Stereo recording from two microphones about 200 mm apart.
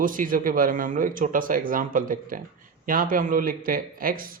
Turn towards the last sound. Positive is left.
turn(degrees=-45)  # may be behind; listen again after turning